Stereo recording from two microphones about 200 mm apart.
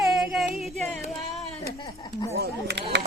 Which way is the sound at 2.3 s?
55° right (ahead or behind).